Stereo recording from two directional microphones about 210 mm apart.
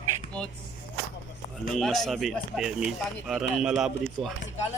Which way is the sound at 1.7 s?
Centre (ahead or behind).